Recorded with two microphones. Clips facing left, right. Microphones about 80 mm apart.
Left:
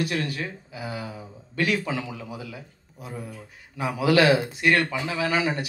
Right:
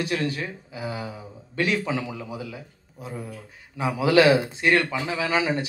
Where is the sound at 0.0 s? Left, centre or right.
Right.